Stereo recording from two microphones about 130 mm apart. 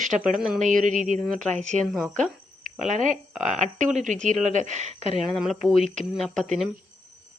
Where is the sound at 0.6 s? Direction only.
80° right.